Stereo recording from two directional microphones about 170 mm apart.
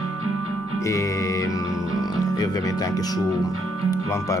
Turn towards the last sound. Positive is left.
turn(degrees=20)  # may be behind; listen again after turning